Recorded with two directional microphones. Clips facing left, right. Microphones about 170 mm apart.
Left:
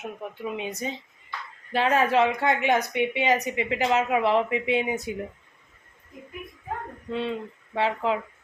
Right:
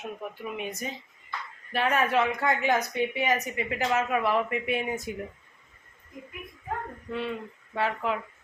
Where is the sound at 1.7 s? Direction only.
30° left (ahead or behind).